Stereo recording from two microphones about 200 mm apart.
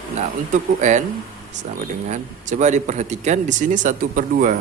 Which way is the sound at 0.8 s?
40° right (ahead or behind).